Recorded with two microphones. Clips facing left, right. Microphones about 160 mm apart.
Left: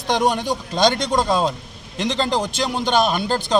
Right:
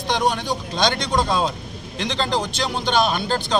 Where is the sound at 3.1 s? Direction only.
10° left (ahead or behind).